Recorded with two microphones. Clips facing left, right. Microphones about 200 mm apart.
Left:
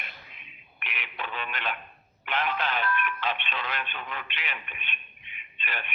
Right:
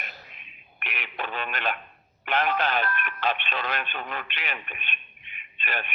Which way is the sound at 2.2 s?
40° right (ahead or behind).